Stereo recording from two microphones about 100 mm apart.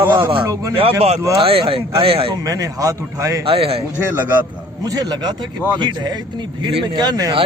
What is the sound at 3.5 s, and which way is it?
Speech, 70° right (ahead or behind).